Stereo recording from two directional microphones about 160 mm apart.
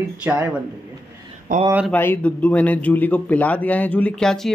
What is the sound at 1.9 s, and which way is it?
A man's voice, 10° left (ahead or behind).